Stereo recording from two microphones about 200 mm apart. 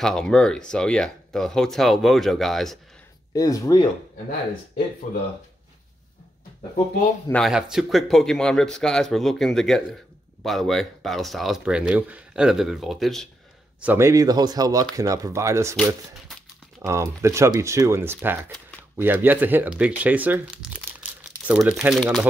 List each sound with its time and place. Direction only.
0.0 s speech: 5° left (ahead or behind)
3.3 s speech: 15° left (ahead or behind)
5.1 s speech: 40° left (ahead or behind)
7.2 s speech: centre (ahead or behind)
13.8 s speech: 15° right (ahead or behind)
16.8 s speech: 15° right (ahead or behind)